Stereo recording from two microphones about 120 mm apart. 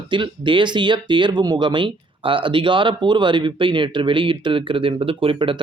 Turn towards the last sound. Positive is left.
turn(degrees=-45)  # may be behind; listen again after turning